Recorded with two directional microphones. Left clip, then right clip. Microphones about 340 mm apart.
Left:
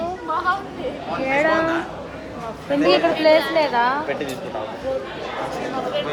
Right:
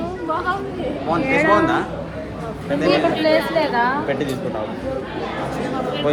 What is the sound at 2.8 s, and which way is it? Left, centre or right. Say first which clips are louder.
A woman's voice: left 1 dB; left.